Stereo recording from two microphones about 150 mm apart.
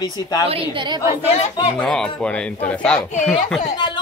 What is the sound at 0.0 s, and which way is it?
Speech, 25° left (ahead or behind).